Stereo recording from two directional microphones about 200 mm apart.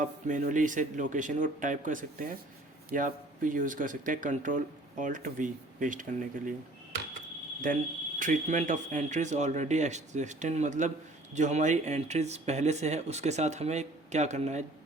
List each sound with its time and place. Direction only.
0.0 s speech: 40° right (ahead or behind)
7.6 s speech: 40° right (ahead or behind)